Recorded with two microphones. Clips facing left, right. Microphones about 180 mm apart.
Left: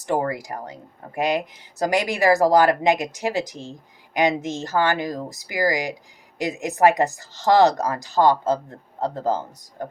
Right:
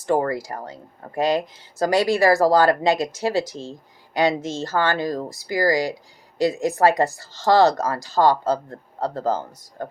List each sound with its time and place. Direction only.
0.0 s speech: 15° left (ahead or behind)